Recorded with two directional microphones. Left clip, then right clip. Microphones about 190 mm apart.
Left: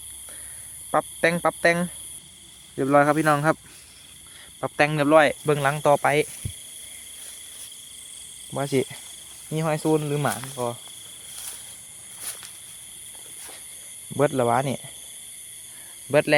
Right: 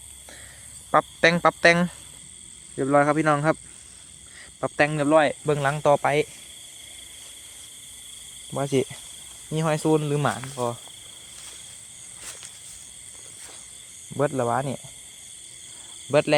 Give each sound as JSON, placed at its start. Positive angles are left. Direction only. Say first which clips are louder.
{"t": 0.9, "sound": "cricket", "louder": "right 3 dB", "side_deg": -5}
{"t": 2.7, "sound": "speech", "louder": "left 1 dB", "side_deg": 5}
{"t": 4.4, "sound": "cricket", "louder": "even", "side_deg": 0}
{"t": 4.9, "sound": "speech", "louder": "left 4 dB", "side_deg": 15}
{"t": 8.5, "sound": "speech", "louder": "even", "side_deg": -5}
{"t": 9.5, "sound": "cricket", "louder": "right 1 dB", "side_deg": -5}
{"t": 14.2, "sound": "speech", "louder": "left 3 dB", "side_deg": 20}
{"t": 16.0, "sound": "speech", "louder": "even", "side_deg": 5}